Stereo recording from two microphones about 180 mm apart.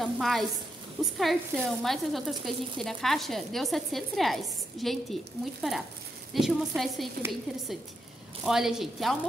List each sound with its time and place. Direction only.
0.0 s a woman's voice: centre (ahead or behind)
8.5 s a woman's voice: centre (ahead or behind)